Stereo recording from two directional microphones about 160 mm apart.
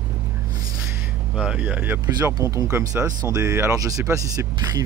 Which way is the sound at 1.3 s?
5° right (ahead or behind).